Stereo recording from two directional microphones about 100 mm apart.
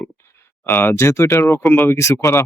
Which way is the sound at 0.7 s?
20° left (ahead or behind).